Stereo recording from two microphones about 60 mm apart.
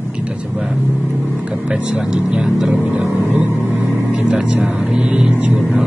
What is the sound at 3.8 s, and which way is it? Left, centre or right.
Vehicle, centre.